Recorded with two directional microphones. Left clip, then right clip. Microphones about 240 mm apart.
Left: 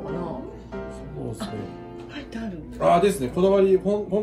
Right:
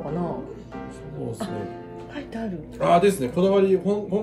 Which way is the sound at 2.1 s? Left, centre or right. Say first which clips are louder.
Right 4 dB; right.